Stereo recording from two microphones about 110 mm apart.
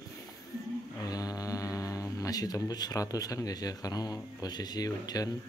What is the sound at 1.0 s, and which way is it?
Speech, 35° left (ahead or behind).